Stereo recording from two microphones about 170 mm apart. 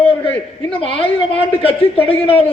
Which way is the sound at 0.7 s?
35° left (ahead or behind).